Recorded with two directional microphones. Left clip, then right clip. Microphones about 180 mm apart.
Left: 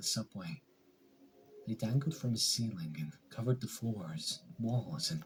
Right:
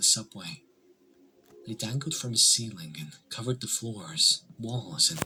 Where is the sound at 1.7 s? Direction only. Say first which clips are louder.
Right 5 dB; 20° right (ahead or behind).